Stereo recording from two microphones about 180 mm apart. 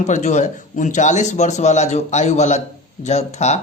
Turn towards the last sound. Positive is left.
turn(degrees=40)  # may be behind; listen again after turning